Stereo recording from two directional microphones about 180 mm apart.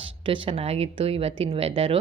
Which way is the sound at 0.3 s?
30° right (ahead or behind).